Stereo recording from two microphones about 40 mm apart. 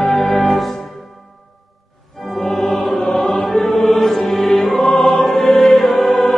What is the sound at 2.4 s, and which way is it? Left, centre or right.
Music, centre.